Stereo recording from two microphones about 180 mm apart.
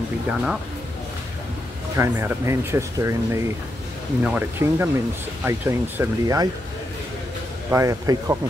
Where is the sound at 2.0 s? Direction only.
15° right (ahead or behind).